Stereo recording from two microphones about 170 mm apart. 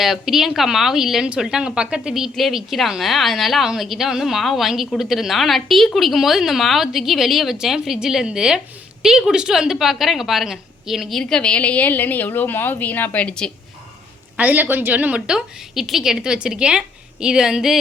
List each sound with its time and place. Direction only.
0.0 s speech: centre (ahead or behind)
14.3 s speech: 10° right (ahead or behind)